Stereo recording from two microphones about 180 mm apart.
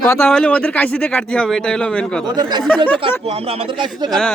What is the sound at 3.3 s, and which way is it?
Speech, 35° right (ahead or behind).